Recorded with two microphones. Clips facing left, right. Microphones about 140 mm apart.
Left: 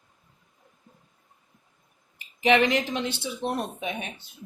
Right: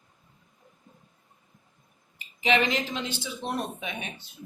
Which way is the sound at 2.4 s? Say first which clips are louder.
Left 4 dB; 65° left (ahead or behind).